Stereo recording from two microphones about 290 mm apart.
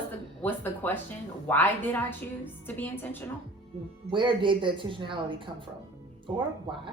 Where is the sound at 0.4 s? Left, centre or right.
Centre.